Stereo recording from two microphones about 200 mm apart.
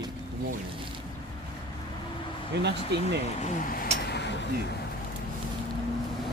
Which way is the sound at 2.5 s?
60° right (ahead or behind).